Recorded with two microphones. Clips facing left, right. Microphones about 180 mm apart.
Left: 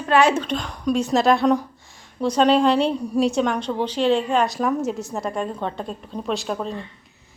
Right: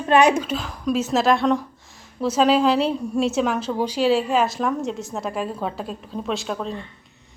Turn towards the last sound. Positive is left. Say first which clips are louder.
# left 1 dB
turn(degrees=0)  # may be behind; listen again after turning